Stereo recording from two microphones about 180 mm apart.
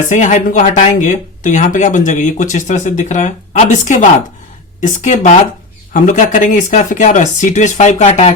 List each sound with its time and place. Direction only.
0.1 s speech: 45° left (ahead or behind)